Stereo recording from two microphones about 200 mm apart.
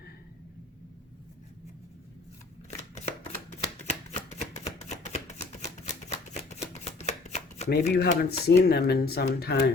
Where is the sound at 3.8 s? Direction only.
35° left (ahead or behind).